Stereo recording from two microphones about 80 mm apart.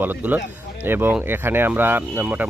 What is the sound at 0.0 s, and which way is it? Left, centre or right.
Speech, right.